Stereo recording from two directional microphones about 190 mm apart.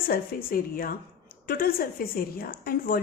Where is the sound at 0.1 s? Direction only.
50° left (ahead or behind).